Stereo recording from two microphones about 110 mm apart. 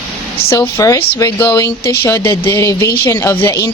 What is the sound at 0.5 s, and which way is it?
A woman's voice, 30° left (ahead or behind).